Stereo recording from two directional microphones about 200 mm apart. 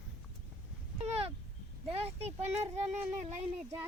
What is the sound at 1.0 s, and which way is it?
Speech, 30° right (ahead or behind).